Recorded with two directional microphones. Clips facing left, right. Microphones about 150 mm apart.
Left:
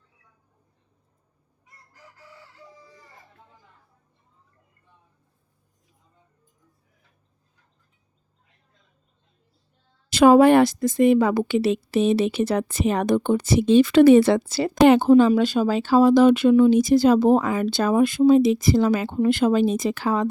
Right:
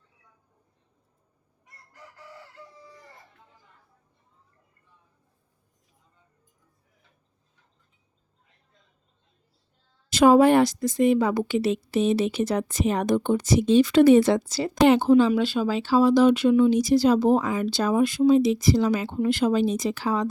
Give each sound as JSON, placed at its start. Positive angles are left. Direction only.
{"t": 1.6, "sound": "chicken", "side_deg": -65}
{"t": 10.1, "sound": "a woman's voice", "side_deg": 65}